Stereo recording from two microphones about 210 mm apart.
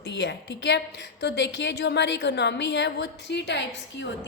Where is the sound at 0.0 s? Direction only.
55° left (ahead or behind).